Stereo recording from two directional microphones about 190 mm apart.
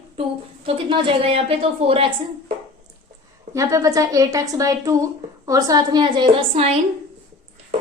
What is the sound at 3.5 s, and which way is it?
A woman's voice, 15° right (ahead or behind).